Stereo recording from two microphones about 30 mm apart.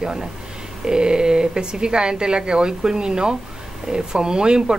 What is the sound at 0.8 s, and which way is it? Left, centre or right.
Speech, right.